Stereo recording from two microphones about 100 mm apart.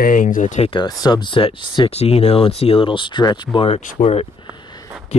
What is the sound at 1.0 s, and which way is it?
Speech, 50° left (ahead or behind).